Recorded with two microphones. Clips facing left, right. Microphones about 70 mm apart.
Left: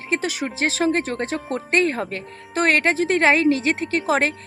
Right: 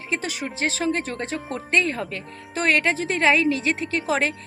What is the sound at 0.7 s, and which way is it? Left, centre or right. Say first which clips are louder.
Speech: left 4 dB; left.